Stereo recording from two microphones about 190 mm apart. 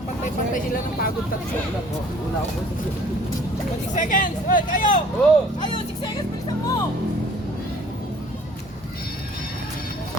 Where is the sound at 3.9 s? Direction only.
45° left (ahead or behind).